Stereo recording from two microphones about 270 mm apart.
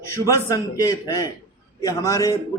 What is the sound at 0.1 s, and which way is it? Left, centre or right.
A man's voice, centre.